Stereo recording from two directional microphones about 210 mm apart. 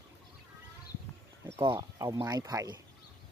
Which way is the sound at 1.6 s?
20° right (ahead or behind).